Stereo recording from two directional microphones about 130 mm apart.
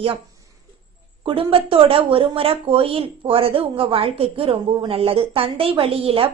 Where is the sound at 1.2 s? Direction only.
45° right (ahead or behind).